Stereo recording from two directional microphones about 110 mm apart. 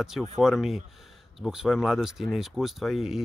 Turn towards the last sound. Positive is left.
turn(degrees=-5)  # may be behind; listen again after turning